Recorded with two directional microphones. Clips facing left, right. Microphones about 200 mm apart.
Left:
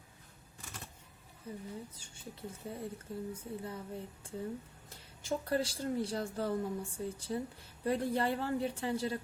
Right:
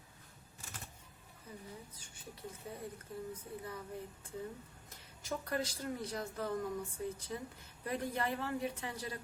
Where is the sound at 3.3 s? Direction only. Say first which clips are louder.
Left 3 dB; 25° left (ahead or behind).